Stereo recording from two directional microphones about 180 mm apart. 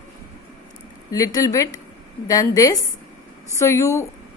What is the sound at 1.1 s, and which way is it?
A woman's voice, 20° left (ahead or behind).